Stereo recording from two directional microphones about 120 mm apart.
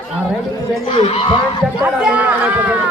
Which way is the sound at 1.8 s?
10° right (ahead or behind).